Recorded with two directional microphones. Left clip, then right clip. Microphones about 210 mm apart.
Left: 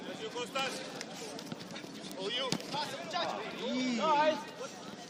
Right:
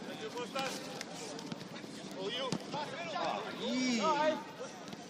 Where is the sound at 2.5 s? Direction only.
35° left (ahead or behind).